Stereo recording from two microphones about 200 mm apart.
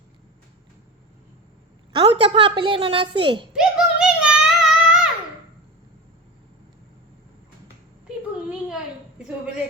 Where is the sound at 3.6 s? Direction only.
5° right (ahead or behind).